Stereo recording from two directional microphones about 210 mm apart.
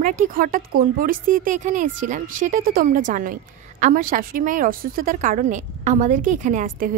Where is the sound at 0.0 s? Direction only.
40° right (ahead or behind).